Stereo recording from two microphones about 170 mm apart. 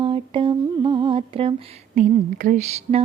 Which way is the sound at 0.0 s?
30° right (ahead or behind).